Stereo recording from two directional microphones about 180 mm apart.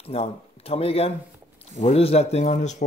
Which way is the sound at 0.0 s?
35° left (ahead or behind).